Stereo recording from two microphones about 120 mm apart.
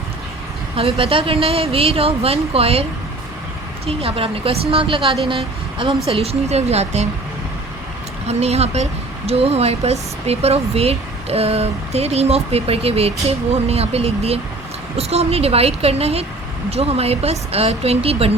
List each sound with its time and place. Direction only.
0.8 s speech: 55° right (ahead or behind)
3.8 s a woman's voice: 55° right (ahead or behind)
8.3 s speech: 60° right (ahead or behind)